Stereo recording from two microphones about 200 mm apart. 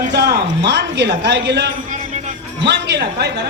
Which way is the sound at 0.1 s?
55° right (ahead or behind).